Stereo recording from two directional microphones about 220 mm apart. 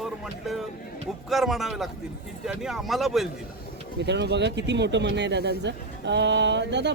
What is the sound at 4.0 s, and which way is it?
Speech, 50° right (ahead or behind).